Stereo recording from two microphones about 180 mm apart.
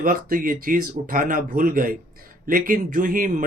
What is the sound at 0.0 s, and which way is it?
Speech, 50° right (ahead or behind).